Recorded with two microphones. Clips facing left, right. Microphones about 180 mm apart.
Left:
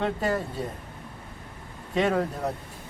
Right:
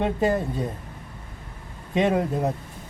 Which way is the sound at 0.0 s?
20° right (ahead or behind).